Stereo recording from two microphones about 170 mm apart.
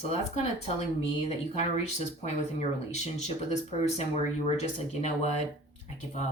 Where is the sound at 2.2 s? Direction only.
40° left (ahead or behind).